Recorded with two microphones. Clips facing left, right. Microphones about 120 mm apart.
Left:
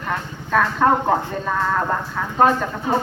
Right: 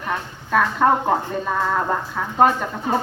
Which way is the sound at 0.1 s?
5° right (ahead or behind).